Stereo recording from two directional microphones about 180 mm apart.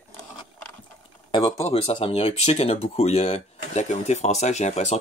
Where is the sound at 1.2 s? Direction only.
25° left (ahead or behind).